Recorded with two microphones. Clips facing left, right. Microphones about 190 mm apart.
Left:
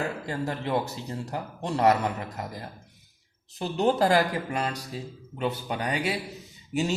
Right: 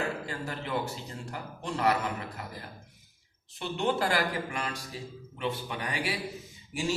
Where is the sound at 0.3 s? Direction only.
35° left (ahead or behind).